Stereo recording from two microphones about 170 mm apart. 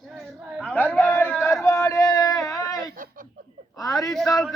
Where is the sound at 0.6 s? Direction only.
10° left (ahead or behind).